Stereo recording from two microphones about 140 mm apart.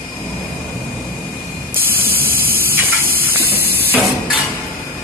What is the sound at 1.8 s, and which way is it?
Spray, 90° right.